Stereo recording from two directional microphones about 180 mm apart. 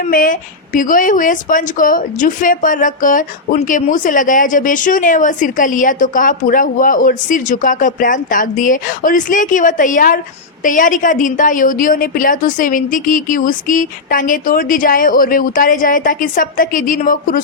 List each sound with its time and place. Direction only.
0.1 s speech: 50° left (ahead or behind)